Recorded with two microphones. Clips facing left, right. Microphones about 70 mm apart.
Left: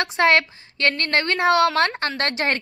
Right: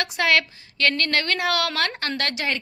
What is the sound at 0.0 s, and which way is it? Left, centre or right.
A woman's voice, left.